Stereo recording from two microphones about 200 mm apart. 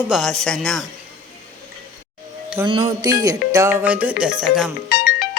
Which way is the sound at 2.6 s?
25° right (ahead or behind).